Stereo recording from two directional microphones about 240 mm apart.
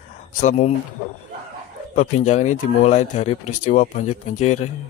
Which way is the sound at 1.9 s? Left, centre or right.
Left.